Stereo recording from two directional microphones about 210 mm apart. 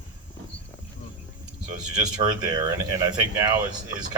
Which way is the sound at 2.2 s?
15° right (ahead or behind).